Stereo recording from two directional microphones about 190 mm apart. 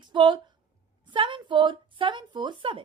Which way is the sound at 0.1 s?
25° right (ahead or behind).